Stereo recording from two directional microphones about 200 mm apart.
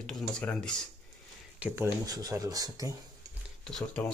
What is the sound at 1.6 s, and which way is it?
Speech, 5° right (ahead or behind).